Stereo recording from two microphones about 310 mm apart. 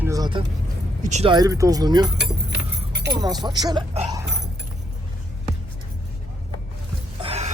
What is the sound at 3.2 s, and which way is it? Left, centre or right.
Speech, centre.